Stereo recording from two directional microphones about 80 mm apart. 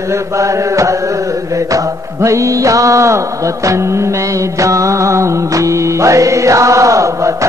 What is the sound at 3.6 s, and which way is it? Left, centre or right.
Music, right.